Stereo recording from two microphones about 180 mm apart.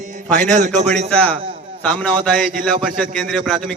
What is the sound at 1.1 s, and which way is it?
A man's voice, 5° left (ahead or behind).